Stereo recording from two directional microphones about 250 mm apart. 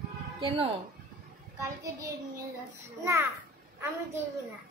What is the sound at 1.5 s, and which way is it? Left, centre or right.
A child's voice, centre.